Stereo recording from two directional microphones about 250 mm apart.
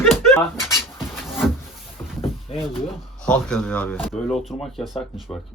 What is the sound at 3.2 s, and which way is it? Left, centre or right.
Speech, centre.